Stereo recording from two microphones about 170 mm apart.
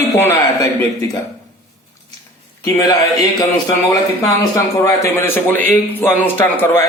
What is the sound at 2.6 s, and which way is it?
A man's voice, 20° left (ahead or behind).